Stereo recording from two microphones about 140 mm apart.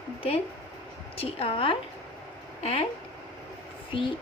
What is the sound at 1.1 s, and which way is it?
Speech, 45° left (ahead or behind).